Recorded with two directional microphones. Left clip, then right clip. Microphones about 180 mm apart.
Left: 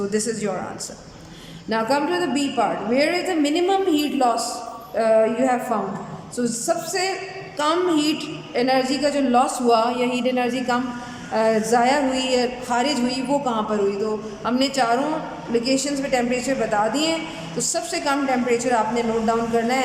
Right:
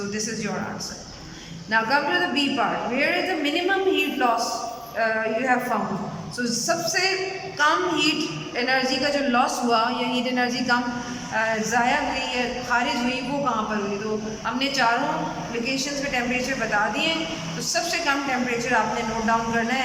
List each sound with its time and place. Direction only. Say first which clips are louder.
0.1 s speech: left 5 dB; 35° left (ahead or behind)
1.7 s a woman's voice: even; 25° left (ahead or behind)